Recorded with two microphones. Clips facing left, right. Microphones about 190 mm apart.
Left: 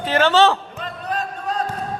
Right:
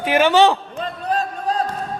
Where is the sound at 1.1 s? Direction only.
35° right (ahead or behind).